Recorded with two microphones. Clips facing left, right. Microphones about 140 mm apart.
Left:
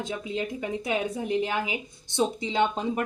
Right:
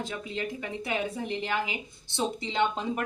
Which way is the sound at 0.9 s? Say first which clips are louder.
Left 3 dB; 15° left (ahead or behind).